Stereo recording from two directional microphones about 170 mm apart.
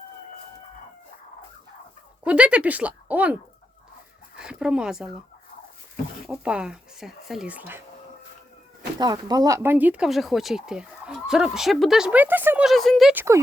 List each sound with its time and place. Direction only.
2.2 s speech: 5° right (ahead or behind)
4.4 s speech: 5° right (ahead or behind)
6.2 s speech: 5° right (ahead or behind)
9.0 s speech: 25° right (ahead or behind); by 13.1 s centre (ahead or behind)
13.1 s speech: 15° right (ahead or behind)